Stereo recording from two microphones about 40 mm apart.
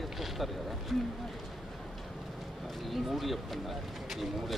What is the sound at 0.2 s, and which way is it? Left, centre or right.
Speech, centre.